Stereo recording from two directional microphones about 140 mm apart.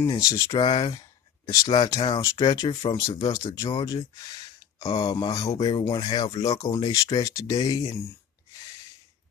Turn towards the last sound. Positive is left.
turn(degrees=25)  # may be behind; listen again after turning